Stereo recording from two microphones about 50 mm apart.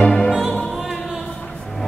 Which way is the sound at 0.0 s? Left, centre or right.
Centre.